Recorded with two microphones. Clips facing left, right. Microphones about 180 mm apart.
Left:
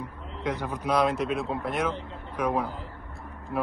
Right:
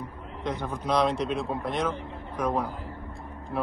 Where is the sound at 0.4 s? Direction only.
10° left (ahead or behind).